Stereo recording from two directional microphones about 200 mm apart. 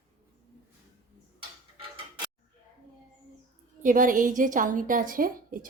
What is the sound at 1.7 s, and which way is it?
Tick-tock, 25° right (ahead or behind).